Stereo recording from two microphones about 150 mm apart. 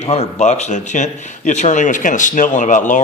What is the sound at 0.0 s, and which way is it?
Speech, 50° left (ahead or behind).